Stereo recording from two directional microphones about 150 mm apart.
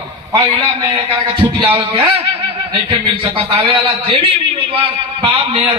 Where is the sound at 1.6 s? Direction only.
40° right (ahead or behind).